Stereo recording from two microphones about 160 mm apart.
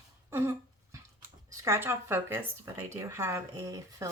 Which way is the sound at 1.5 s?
20° right (ahead or behind).